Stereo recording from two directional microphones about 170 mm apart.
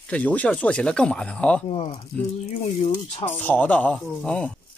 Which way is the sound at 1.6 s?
35° left (ahead or behind).